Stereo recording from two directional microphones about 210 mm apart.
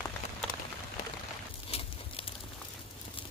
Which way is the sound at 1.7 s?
30° left (ahead or behind).